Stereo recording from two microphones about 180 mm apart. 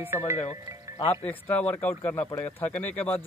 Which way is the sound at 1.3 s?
10° left (ahead or behind).